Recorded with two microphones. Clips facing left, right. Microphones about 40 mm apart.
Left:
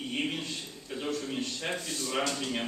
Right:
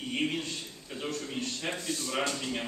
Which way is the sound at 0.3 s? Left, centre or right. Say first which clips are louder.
Right 1 dB; centre.